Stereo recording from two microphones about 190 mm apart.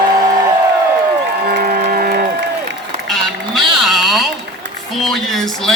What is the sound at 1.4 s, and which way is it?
Applause, 50° right (ahead or behind).